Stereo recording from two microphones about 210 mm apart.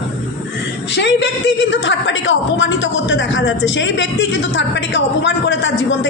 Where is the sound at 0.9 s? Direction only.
55° left (ahead or behind).